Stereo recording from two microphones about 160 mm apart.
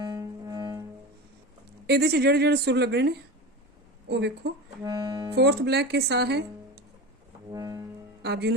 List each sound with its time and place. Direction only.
0.0 s music: 25° right (ahead or behind)
1.9 s speech: 90° right
4.1 s speech: 90° right
4.8 s music: 20° right (ahead or behind)
5.3 s speech: 90° right
7.5 s music: 20° right (ahead or behind)
8.2 s speech: 90° right